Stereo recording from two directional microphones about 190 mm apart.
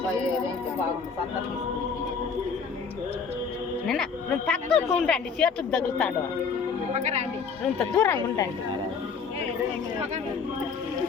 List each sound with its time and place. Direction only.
3.8 s speech: 5° left (ahead or behind)
6.9 s speech: 35° right (ahead or behind)
7.8 s speech: 10° left (ahead or behind)